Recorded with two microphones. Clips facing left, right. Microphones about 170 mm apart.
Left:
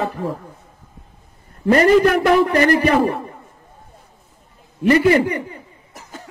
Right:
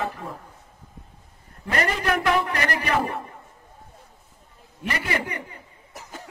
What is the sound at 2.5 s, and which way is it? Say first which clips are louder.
Speech: left 11 dB; 35° left (ahead or behind).